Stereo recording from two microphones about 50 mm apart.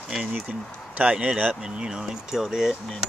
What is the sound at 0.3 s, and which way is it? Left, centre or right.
Speech, right.